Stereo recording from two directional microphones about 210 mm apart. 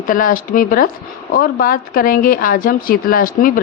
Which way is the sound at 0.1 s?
40° left (ahead or behind).